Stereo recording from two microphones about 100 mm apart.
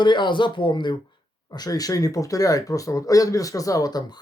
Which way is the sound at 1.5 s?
40° left (ahead or behind).